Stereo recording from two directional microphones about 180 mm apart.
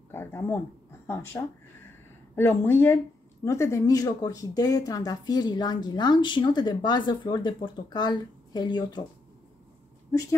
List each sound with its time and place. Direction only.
0.1 s a woman's voice: 10° left (ahead or behind)